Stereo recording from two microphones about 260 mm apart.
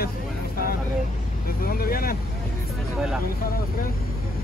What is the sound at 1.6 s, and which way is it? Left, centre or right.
Speech, left.